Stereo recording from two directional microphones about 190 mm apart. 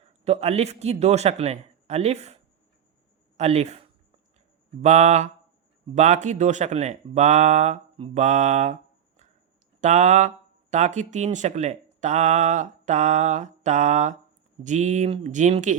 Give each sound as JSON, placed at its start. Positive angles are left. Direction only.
{"t": 0.0, "sound": "speech", "side_deg": -35}
{"t": 7.9, "sound": "mantra", "side_deg": -30}
{"t": 8.2, "sound": "a sound", "side_deg": -40}
{"t": 9.8, "sound": "speech", "side_deg": -40}